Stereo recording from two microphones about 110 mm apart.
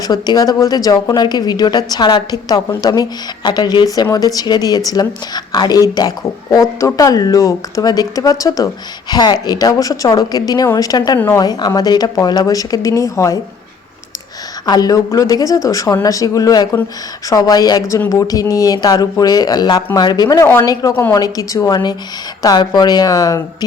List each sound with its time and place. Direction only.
0.0 s speech: 35° left (ahead or behind)
14.7 s speech: 35° left (ahead or behind)